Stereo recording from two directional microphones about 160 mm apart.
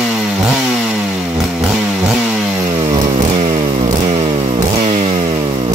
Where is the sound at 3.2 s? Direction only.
30° right (ahead or behind).